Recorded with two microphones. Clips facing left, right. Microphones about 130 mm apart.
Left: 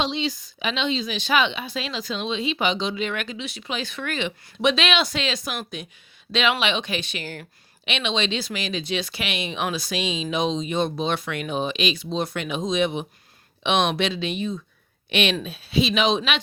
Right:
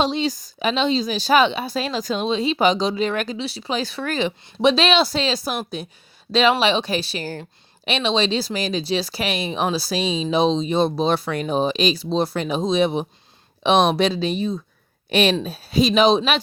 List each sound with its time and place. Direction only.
0.0 s speech: 40° right (ahead or behind)